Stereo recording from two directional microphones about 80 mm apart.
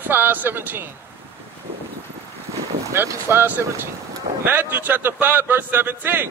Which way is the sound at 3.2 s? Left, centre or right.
Right.